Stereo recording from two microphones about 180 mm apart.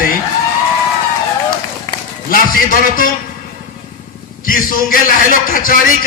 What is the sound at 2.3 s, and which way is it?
Speech, 50° left (ahead or behind).